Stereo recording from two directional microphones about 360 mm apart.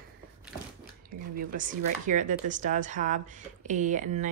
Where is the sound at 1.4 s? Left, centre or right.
Right.